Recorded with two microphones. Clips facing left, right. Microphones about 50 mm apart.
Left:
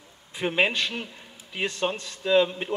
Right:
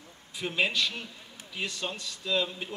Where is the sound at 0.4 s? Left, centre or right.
Left.